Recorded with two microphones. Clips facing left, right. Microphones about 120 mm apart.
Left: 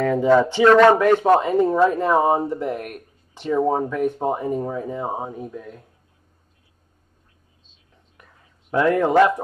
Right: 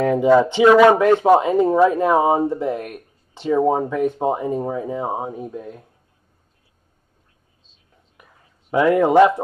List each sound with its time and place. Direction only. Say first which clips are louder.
0.0 s speech: right 2 dB; 15° right (ahead or behind)
5.5 s speech: right 3 dB; 25° right (ahead or behind)
8.2 s a sound: right 1 dB; 10° right (ahead or behind)